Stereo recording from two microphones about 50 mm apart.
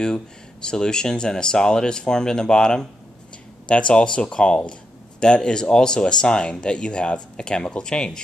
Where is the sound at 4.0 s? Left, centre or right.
Centre.